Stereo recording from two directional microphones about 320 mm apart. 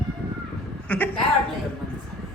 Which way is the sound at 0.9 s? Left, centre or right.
Centre.